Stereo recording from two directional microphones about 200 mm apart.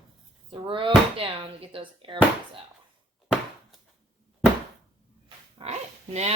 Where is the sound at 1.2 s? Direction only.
30° right (ahead or behind).